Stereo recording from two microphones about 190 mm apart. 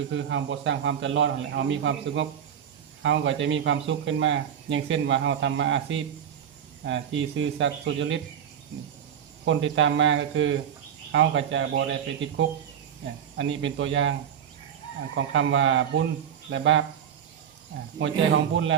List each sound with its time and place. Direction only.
0.1 s speech: 75° right (ahead or behind)
9.5 s speech: 80° right